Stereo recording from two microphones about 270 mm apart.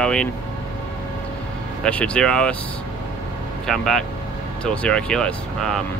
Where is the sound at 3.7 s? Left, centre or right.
Centre.